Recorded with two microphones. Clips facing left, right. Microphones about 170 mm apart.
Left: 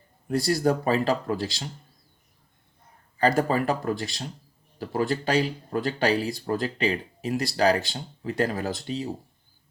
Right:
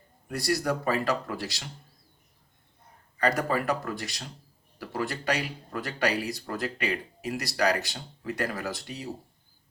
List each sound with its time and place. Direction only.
0.3 s speech: 25° left (ahead or behind)
3.2 s speech: 25° left (ahead or behind)